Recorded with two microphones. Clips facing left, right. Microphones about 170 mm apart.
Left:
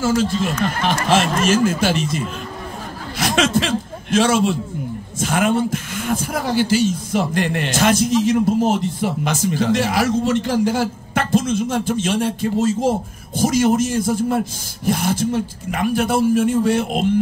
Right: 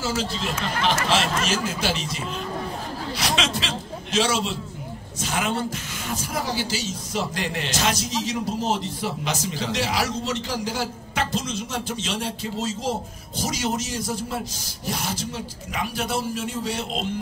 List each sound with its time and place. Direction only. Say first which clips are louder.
0.0 s a man's voice: left 9 dB; 50° left (ahead or behind)